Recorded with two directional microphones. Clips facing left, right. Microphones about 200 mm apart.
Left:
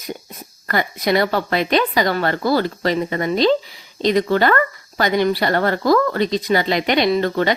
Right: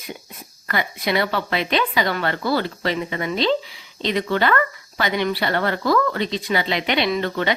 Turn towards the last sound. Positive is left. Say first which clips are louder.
# left 4 dB
turn(degrees=40)  # may be behind; listen again after turning